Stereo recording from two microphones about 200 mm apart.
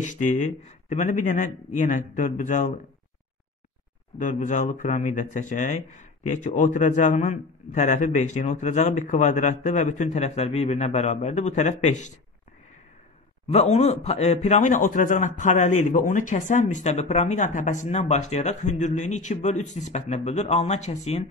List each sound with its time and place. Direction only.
0.0 s speech: 40° left (ahead or behind)
4.2 s speech: 40° left (ahead or behind)
13.5 s speech: 35° left (ahead or behind)